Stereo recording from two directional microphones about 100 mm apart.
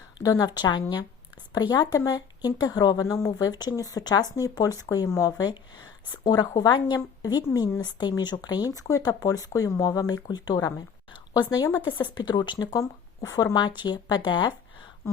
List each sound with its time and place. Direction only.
0.2 s speech: 40° left (ahead or behind)
6.2 s speech: 40° left (ahead or behind)
11.9 s speech: 50° left (ahead or behind)
15.0 s speech: 30° left (ahead or behind)